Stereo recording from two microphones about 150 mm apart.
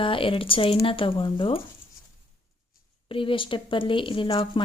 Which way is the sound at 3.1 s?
35° left (ahead or behind).